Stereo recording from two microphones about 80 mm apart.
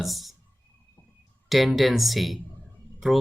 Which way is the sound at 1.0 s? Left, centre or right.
Left.